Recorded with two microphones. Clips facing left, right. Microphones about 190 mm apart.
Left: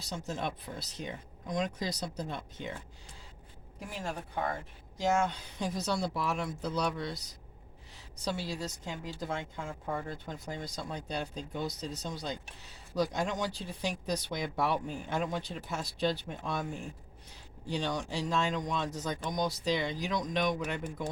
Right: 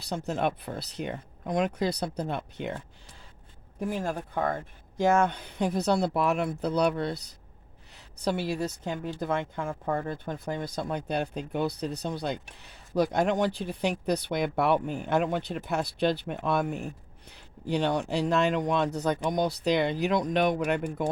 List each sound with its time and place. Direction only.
0.0 s a woman's voice: 60° right (ahead or behind)
3.8 s a woman's voice: 55° right (ahead or behind)